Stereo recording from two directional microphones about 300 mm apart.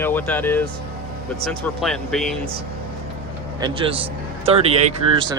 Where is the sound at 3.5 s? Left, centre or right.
Centre.